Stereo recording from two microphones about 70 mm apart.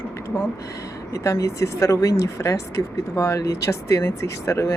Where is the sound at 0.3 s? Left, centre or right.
Centre.